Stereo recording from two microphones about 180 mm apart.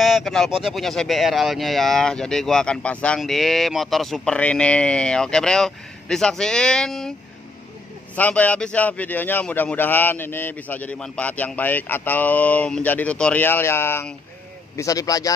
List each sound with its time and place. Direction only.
0.0 s speech: centre (ahead or behind)
8.2 s a man's voice: 10° left (ahead or behind)